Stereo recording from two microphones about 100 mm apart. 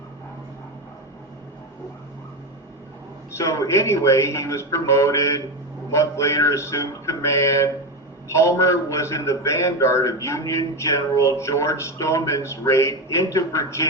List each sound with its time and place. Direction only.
3.3 s a man's voice: 30° left (ahead or behind)